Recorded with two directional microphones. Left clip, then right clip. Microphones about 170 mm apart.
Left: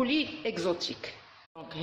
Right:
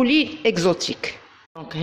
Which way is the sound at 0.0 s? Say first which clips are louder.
Right 11 dB; 60° right (ahead or behind).